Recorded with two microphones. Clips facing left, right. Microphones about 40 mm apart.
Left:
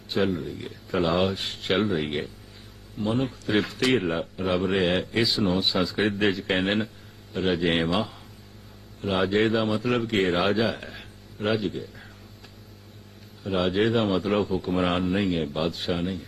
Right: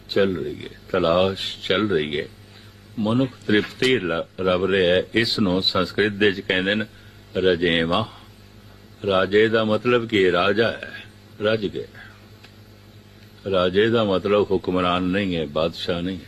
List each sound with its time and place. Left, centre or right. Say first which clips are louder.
0.1 s a man's voice: right 5 dB; right
13.4 s a man's voice: right 5 dB; right